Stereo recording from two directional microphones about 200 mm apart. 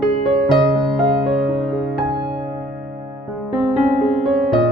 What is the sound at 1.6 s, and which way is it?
Music, centre (ahead or behind).